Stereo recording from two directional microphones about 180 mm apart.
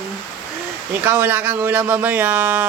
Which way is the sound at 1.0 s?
10° right (ahead or behind).